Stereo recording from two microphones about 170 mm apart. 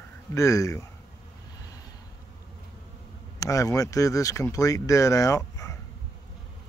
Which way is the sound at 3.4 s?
20° left (ahead or behind).